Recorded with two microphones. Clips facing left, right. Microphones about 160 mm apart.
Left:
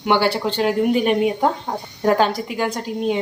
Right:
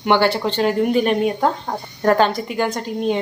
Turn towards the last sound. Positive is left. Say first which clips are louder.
# right 1 dB
turn(degrees=5)  # may be behind; listen again after turning